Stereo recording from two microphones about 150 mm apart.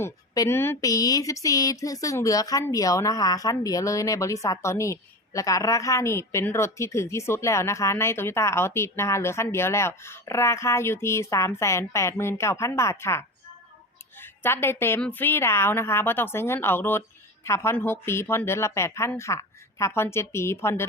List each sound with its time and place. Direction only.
0.0 s a woman's voice: 15° left (ahead or behind)